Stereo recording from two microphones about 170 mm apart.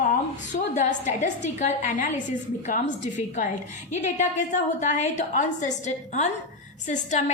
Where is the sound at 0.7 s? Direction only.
45° left (ahead or behind).